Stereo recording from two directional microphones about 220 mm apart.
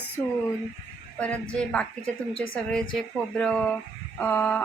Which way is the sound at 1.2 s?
5° left (ahead or behind).